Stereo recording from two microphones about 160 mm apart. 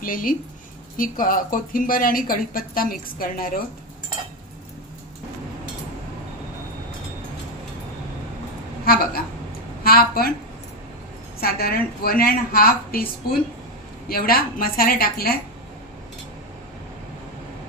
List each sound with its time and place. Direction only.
0.0 s speech: 60° left (ahead or behind)
8.8 s a woman's voice: 70° left (ahead or behind)
11.3 s a woman's voice: 70° left (ahead or behind)